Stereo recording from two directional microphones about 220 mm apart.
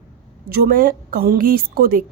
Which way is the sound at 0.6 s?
40° right (ahead or behind).